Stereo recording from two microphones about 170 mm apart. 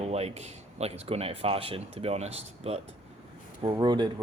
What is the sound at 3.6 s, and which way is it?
Speech, 25° right (ahead or behind).